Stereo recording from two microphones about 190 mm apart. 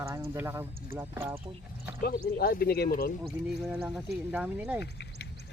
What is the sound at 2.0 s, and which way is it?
Speech, 55° left (ahead or behind).